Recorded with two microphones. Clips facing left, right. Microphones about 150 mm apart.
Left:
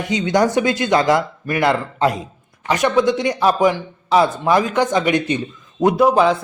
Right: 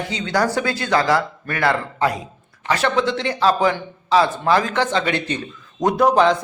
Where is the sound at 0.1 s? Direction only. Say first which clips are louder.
Left 5 dB; 20° left (ahead or behind).